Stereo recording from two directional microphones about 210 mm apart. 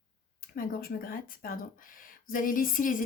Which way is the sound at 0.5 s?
45° left (ahead or behind).